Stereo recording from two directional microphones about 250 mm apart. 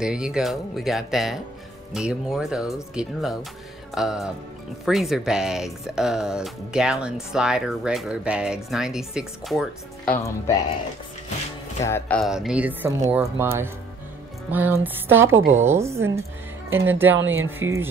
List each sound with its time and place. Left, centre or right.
0.0 s speech: centre
11.8 s a woman's voice: centre
17.2 s speech: right
17.5 s a woman's voice: centre